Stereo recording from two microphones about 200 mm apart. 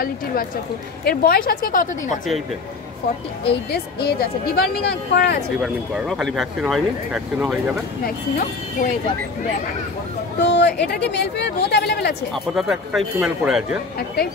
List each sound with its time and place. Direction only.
1.0 s speech: 50° left (ahead or behind)
3.7 s speech: 50° left (ahead or behind)
5.6 s speech: centre (ahead or behind)
10.4 s speech: 60° left (ahead or behind)
12.5 s speech: centre (ahead or behind)
13.9 s speech: 50° left (ahead or behind)